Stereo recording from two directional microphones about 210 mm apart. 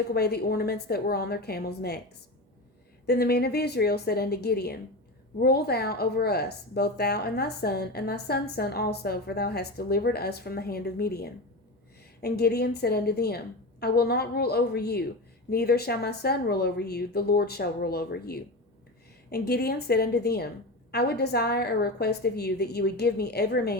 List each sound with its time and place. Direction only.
0.1 s speech: 50° left (ahead or behind)
3.1 s speech: 50° left (ahead or behind)